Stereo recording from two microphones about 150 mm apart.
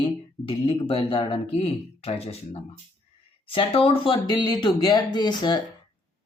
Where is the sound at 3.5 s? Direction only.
35° left (ahead or behind).